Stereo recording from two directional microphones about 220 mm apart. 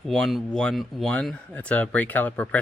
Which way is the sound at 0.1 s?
Centre (ahead or behind).